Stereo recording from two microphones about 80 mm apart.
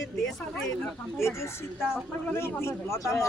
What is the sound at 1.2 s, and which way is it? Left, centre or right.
A man's voice, left.